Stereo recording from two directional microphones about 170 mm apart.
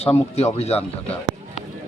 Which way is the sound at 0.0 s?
35° left (ahead or behind).